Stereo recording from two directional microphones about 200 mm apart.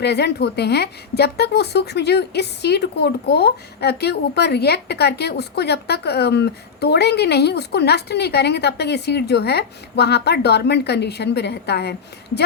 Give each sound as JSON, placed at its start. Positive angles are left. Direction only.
{"t": 0.0, "sound": "a woman's voice", "side_deg": 55}